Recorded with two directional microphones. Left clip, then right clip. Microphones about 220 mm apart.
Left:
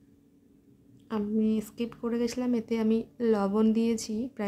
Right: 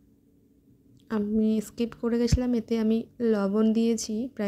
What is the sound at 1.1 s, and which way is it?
Speech, 20° right (ahead or behind).